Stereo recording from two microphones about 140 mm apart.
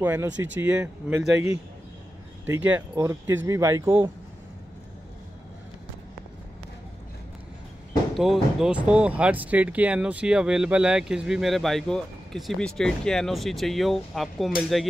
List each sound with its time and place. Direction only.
0.0 s speech: 15° right (ahead or behind)
8.2 s speech: 5° right (ahead or behind)